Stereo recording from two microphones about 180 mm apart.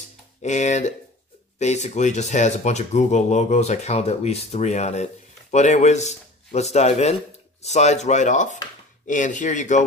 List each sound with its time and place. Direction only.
0.4 s speech: 40° left (ahead or behind)